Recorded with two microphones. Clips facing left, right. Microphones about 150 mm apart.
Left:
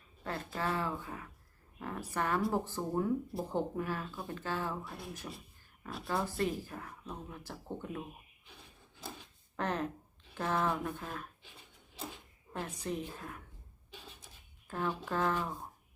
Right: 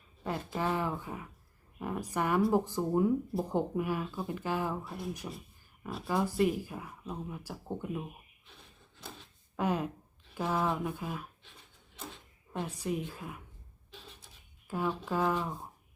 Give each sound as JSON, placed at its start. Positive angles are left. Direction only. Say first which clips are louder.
{"t": 0.3, "sound": "speech", "louder": "right 3 dB", "side_deg": -15}
{"t": 9.6, "sound": "speech", "louder": "right 3 dB", "side_deg": -10}
{"t": 12.6, "sound": "speech", "louder": "right 3 dB", "side_deg": -10}
{"t": 14.7, "sound": "speech", "louder": "right 3 dB", "side_deg": -5}